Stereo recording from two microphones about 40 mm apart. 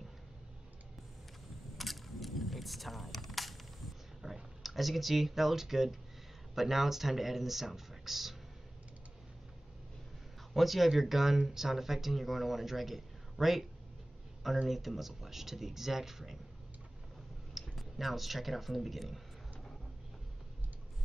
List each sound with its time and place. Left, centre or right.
1.8 s a sound: centre
4.2 s speech: centre
10.5 s speech: centre
14.7 s speech: centre
17.6 s speech: centre